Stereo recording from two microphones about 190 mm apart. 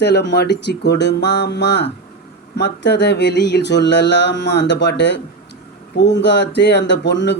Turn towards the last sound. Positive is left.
turn(degrees=65)  # may be behind; listen again after turning